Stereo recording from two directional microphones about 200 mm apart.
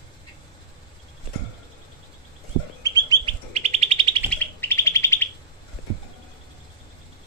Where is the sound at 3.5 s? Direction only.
35° right (ahead or behind).